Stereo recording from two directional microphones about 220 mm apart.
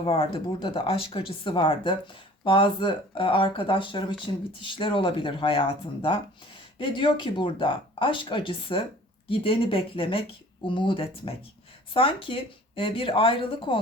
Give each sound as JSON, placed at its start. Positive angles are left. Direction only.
{"t": 0.0, "sound": "speech", "side_deg": 25}